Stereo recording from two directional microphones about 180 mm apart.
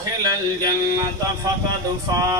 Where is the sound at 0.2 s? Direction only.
20° right (ahead or behind).